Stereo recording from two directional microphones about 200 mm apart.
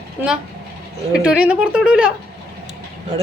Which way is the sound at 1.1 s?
5° right (ahead or behind).